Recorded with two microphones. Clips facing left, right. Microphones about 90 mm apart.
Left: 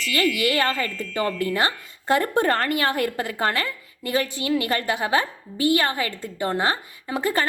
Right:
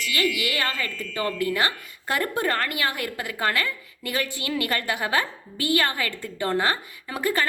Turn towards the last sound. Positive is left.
turn(degrees=25)  # may be behind; listen again after turning